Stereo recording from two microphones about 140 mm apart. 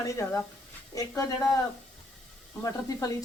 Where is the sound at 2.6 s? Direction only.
25° left (ahead or behind).